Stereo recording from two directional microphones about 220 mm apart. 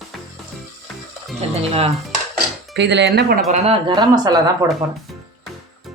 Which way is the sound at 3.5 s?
25° right (ahead or behind).